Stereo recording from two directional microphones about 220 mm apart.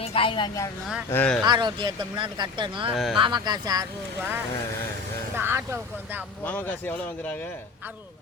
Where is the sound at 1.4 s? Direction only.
20° right (ahead or behind).